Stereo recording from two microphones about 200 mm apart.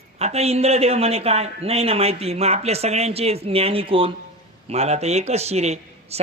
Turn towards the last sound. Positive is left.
turn(degrees=-30)  # may be behind; listen again after turning